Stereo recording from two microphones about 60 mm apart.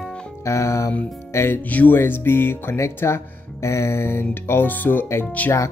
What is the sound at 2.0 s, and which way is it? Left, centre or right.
Speech, left.